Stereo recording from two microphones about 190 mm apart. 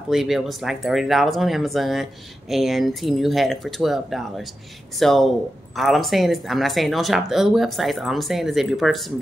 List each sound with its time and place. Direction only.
0.1 s speech: centre (ahead or behind)